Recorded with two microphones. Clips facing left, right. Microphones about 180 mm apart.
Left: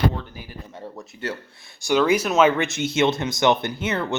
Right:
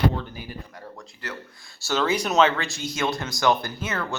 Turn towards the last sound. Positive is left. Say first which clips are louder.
# left 5 dB
turn(degrees=25)  # may be behind; listen again after turning